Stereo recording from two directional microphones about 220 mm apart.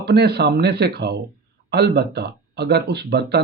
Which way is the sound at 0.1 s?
45° right (ahead or behind).